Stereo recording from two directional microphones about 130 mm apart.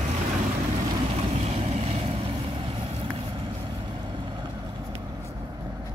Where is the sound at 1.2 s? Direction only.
55° right (ahead or behind).